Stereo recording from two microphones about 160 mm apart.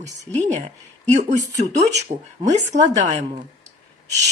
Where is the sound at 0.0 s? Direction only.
45° right (ahead or behind).